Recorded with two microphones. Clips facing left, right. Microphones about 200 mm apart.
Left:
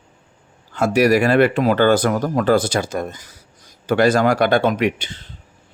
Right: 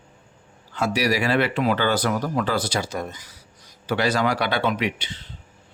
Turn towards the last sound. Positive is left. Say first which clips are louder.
# left 6 dB
turn(degrees=50)  # may be behind; listen again after turning